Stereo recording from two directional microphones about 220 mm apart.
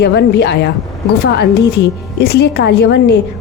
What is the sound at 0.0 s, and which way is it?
Speech, 50° left (ahead or behind).